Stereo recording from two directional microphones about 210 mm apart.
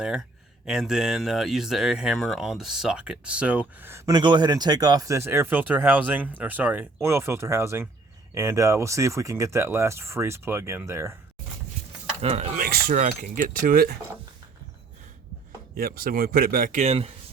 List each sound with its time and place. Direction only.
0.0 s speech: 5° right (ahead or behind)
12.2 s speech: 30° right (ahead or behind)
12.6 s speech: 40° right (ahead or behind)
15.7 s a man's voice: 45° right (ahead or behind)